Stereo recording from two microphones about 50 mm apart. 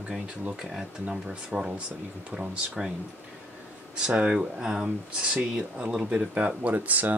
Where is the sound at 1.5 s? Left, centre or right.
Centre.